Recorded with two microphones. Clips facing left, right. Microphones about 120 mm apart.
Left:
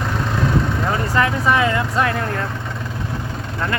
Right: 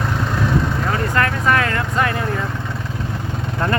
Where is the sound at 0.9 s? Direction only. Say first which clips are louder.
Left 1 dB; 15° left (ahead or behind).